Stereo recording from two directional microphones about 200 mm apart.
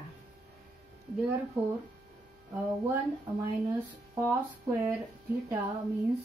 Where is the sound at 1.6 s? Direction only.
10° right (ahead or behind).